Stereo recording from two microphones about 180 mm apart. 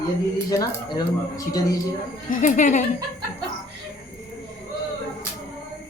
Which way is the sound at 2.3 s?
45° left (ahead or behind).